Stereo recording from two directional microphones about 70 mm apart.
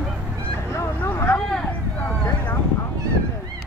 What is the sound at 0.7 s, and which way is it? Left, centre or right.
Vehicle, left.